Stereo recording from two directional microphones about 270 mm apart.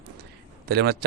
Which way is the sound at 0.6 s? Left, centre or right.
Right.